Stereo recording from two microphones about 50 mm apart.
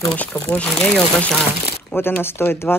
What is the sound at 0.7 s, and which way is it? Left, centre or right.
Speech, centre.